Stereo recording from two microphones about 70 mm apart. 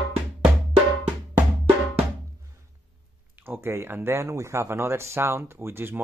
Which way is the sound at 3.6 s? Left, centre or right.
Right.